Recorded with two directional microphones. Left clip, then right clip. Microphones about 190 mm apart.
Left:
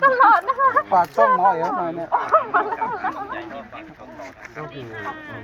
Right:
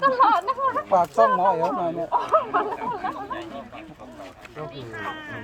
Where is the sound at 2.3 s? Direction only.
15° right (ahead or behind).